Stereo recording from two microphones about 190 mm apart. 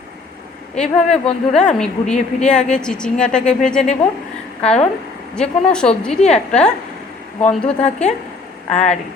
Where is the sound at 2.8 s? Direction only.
5° left (ahead or behind).